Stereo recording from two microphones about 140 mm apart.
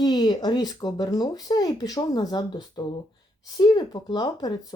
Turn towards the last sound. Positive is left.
turn(degrees=30)  # may be behind; listen again after turning